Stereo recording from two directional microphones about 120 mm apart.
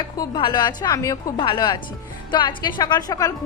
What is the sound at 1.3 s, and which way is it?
A woman's voice, 40° left (ahead or behind).